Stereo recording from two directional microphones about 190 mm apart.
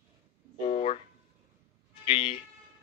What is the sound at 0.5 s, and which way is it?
Speech, 35° left (ahead or behind).